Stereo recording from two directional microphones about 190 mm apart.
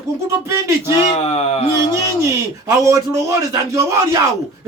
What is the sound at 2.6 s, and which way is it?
A man's voice, 15° right (ahead or behind).